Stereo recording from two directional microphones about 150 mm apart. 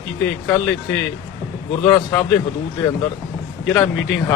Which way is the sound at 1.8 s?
15° left (ahead or behind).